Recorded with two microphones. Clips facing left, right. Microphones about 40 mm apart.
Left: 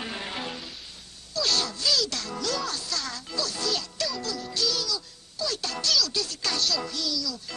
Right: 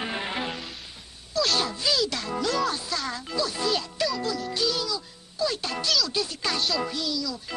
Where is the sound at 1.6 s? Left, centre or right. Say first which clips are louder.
Right 2 dB; right.